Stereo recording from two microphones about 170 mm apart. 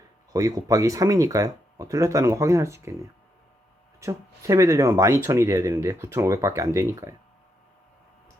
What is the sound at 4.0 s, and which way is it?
Speech, 20° right (ahead or behind).